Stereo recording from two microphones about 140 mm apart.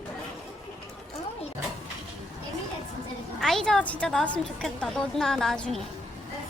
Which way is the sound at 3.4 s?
5° left (ahead or behind).